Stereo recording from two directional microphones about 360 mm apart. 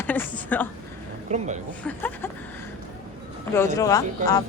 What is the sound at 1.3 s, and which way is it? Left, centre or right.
Speech, centre.